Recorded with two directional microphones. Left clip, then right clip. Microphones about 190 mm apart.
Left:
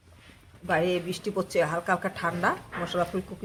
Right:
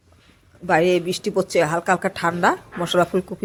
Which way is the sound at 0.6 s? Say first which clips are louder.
Right 8 dB; 45° right (ahead or behind).